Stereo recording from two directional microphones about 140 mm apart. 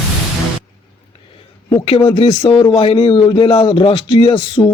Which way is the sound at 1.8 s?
40° left (ahead or behind).